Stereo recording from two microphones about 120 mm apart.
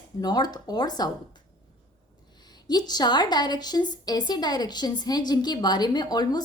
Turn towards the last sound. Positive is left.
turn(degrees=35)  # may be behind; listen again after turning